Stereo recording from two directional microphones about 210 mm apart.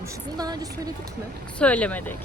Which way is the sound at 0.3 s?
20° right (ahead or behind).